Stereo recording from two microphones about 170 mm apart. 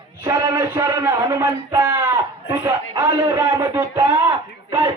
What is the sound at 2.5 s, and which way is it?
A man's voice, 15° right (ahead or behind).